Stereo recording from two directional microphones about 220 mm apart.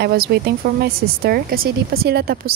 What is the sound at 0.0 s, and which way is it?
A woman's voice, 45° right (ahead or behind).